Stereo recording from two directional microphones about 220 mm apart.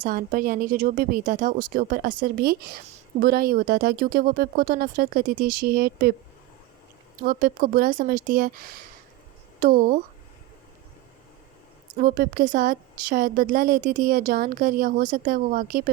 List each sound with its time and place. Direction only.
0.0 s a woman's voice: 40° right (ahead or behind)
7.2 s a woman's voice: 40° right (ahead or behind)
9.6 s speech: 40° right (ahead or behind)
11.9 s a woman's voice: 40° right (ahead or behind)